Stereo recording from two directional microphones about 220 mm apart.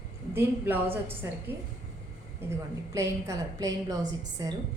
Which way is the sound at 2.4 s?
10° right (ahead or behind).